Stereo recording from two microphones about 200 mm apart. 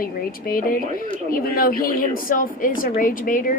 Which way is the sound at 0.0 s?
45° left (ahead or behind).